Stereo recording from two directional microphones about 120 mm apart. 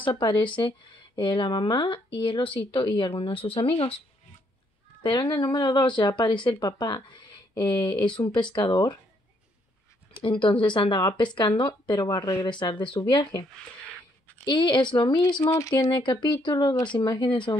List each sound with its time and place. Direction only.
0.2 s speech: 40° left (ahead or behind)
5.0 s speech: 45° left (ahead or behind)
10.2 s speech: 45° left (ahead or behind); by 12.4 s 30° left (ahead or behind)
12.4 s speech: 40° left (ahead or behind)
15.4 s speech: 25° left (ahead or behind)
15.8 s speech: 35° left (ahead or behind)